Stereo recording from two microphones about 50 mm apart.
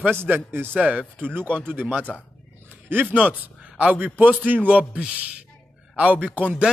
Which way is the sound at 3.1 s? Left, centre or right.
Right.